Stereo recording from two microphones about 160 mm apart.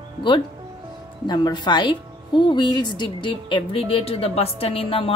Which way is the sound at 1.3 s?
25° left (ahead or behind).